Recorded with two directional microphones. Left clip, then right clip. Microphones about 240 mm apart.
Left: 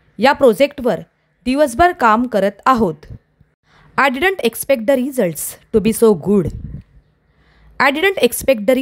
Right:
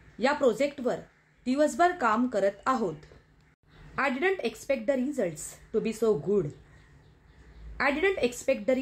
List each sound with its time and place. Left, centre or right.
0.2 s speech: left
7.7 s a woman's voice: left